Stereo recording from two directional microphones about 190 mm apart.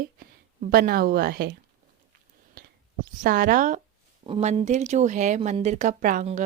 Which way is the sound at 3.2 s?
45° right (ahead or behind).